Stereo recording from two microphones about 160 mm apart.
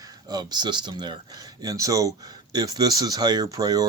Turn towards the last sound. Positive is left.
turn(degrees=-25)  # may be behind; listen again after turning